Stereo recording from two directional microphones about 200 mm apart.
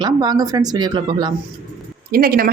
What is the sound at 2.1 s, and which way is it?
Speech, 45° right (ahead or behind).